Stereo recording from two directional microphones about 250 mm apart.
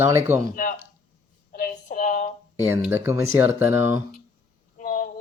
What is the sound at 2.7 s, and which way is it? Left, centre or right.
Speech, centre.